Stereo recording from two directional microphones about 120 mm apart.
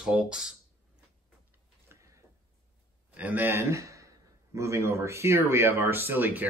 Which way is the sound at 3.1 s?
15° right (ahead or behind).